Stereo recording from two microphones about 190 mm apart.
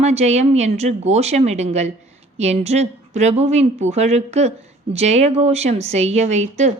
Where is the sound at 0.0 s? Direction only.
35° right (ahead or behind).